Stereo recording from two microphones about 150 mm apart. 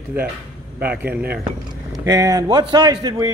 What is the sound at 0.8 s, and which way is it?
Speech, 10° right (ahead or behind).